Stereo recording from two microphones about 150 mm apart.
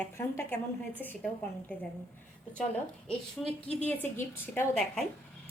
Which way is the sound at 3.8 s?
15° left (ahead or behind).